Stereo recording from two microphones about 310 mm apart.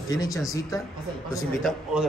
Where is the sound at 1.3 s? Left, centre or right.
Centre.